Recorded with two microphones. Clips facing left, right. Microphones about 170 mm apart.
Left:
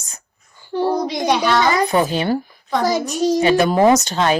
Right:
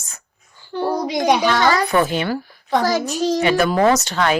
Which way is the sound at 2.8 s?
15° left (ahead or behind).